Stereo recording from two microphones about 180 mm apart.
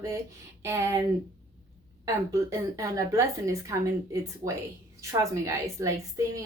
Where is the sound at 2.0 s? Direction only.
15° right (ahead or behind).